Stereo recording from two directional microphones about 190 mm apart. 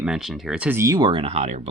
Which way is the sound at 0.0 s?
Centre (ahead or behind).